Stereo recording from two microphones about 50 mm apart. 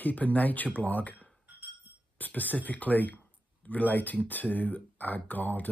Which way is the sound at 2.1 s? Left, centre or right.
Left.